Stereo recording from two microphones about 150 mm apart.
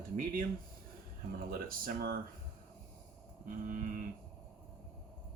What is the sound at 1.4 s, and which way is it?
Speech, 70° right (ahead or behind).